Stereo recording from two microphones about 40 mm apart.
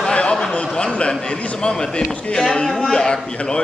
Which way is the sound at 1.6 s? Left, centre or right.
Centre.